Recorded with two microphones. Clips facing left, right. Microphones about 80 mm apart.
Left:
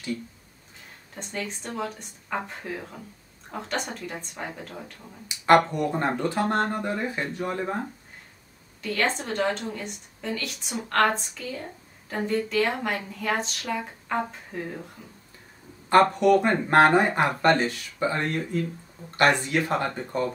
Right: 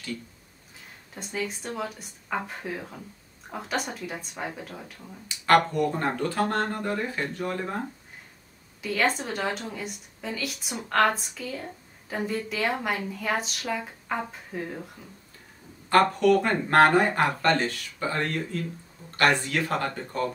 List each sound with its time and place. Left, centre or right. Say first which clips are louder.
1.1 s speech: right 1 dB; centre
5.4 s speech: left 2 dB; centre
8.8 s speech: right 1 dB; centre
15.9 s speech: left 2 dB; left